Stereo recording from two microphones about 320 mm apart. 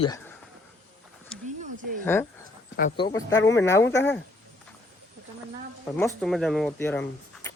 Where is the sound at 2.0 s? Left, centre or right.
Centre.